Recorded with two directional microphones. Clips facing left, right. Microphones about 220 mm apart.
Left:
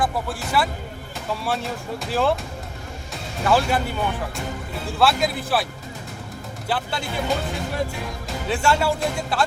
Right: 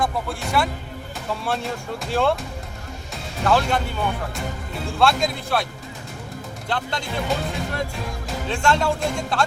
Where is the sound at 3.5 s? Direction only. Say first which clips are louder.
Even; 5° left (ahead or behind).